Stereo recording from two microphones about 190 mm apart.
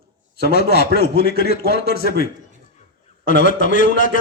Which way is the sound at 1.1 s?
55° right (ahead or behind).